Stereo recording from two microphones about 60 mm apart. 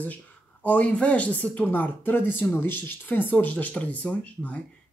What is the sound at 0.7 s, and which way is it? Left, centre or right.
Speech, left.